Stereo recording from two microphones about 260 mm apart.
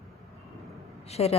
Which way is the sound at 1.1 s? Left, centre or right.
Left.